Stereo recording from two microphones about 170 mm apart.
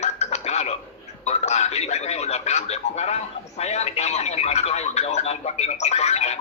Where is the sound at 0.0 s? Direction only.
40° left (ahead or behind).